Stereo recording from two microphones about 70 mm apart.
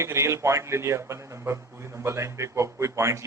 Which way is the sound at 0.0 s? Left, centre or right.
Right.